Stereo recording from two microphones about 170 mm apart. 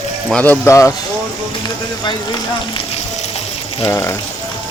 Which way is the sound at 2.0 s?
30° left (ahead or behind).